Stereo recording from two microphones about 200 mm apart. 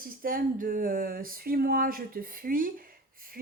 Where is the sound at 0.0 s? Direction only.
45° right (ahead or behind).